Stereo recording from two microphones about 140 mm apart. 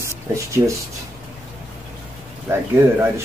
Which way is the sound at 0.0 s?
20° right (ahead or behind).